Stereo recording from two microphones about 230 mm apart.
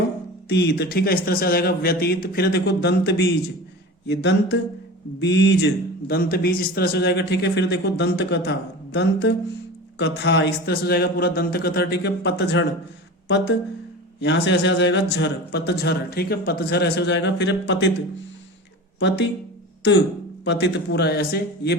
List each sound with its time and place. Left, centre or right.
0.4 s a man's voice: left
18.9 s a man's voice: left
20.4 s a man's voice: left